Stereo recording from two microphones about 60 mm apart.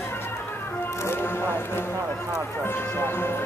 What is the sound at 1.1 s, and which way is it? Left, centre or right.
Music, left.